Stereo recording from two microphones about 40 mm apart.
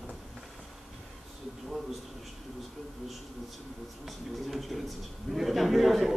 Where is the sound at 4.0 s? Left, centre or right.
Centre.